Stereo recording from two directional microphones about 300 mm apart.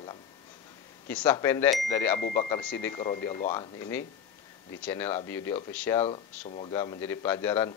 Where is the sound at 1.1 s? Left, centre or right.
Centre.